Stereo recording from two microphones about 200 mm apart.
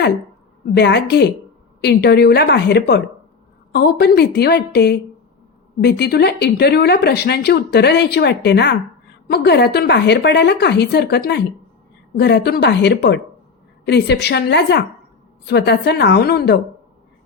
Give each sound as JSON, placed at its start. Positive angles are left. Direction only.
{"t": 0.7, "sound": "speech", "side_deg": 60}